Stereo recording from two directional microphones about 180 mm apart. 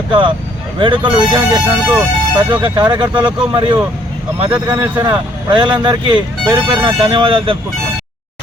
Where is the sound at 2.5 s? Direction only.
25° right (ahead or behind).